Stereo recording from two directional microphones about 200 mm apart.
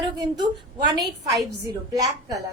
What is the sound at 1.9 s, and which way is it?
Speech, 15° right (ahead or behind).